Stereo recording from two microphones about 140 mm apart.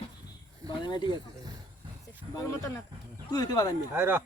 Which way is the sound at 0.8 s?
30° left (ahead or behind).